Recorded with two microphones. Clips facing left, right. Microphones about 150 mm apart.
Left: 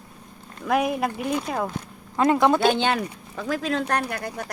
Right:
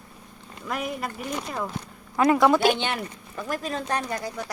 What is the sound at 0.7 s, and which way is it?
Speech, 90° left.